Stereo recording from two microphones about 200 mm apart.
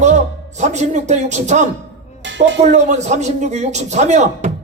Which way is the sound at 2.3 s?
65° right (ahead or behind).